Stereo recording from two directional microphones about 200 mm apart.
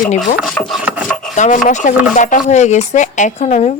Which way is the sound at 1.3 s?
35° left (ahead or behind).